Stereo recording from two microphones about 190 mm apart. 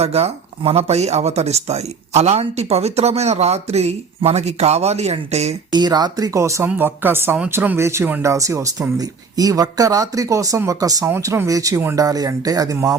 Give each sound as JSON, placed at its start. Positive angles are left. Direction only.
{"t": 0.0, "sound": "speech", "side_deg": -35}
{"t": 5.7, "sound": "speech", "side_deg": -20}